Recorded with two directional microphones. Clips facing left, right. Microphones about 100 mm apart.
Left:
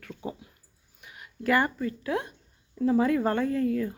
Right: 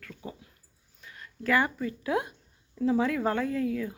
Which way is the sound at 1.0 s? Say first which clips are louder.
Left 3 dB; 15° left (ahead or behind).